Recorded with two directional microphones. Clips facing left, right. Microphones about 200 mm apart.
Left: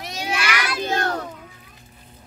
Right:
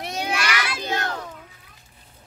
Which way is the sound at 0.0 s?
60° right (ahead or behind).